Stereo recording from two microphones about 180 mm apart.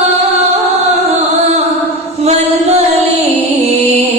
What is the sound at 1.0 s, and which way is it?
Music, 35° right (ahead or behind).